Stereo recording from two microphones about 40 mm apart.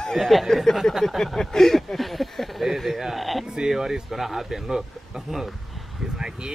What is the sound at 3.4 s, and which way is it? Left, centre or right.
Speech, centre.